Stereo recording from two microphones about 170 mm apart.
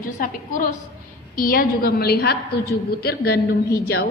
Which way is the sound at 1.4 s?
55° left (ahead or behind).